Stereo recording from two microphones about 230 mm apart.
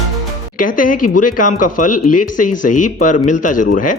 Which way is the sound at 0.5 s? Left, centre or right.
Left.